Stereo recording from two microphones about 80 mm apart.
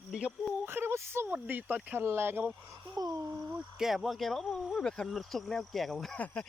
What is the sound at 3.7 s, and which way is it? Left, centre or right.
Speech, centre.